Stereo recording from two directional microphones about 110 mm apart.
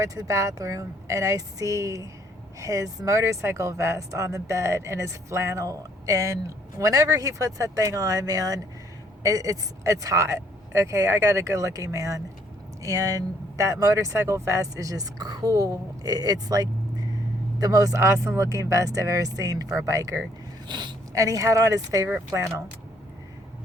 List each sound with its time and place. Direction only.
0.0 s speech: 30° right (ahead or behind)
20.7 s speech: 45° right (ahead or behind)
21.1 s speech: 30° right (ahead or behind)